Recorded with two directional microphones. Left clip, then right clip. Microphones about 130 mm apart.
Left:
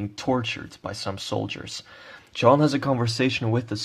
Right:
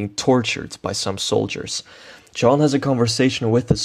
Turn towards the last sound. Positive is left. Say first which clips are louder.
# right 7 dB
turn(degrees=-25)  # may be behind; listen again after turning